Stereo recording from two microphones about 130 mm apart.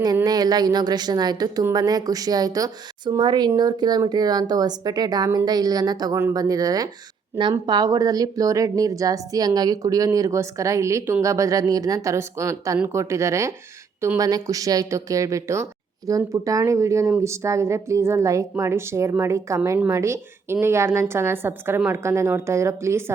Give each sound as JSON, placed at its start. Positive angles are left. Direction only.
{"t": 0.3, "sound": "a woman's voice", "side_deg": -30}
{"t": 7.4, "sound": "a woman's voice", "side_deg": -20}